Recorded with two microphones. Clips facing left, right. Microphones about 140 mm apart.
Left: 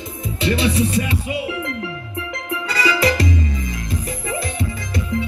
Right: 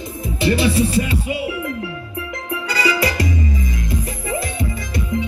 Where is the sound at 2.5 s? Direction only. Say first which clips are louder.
Even; 25° right (ahead or behind).